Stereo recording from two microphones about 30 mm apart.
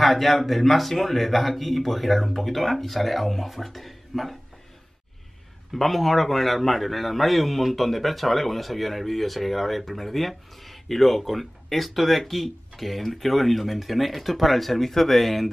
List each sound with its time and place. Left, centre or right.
0.0 s a man's voice: centre
5.7 s a man's voice: centre